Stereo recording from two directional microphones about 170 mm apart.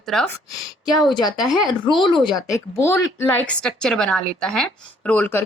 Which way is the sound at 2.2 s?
25° left (ahead or behind).